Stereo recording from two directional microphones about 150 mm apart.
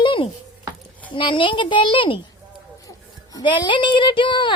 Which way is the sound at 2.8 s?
25° left (ahead or behind).